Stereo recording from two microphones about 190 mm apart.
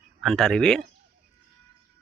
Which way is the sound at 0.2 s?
Centre (ahead or behind).